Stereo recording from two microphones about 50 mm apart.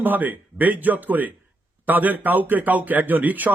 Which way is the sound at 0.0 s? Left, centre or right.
Right.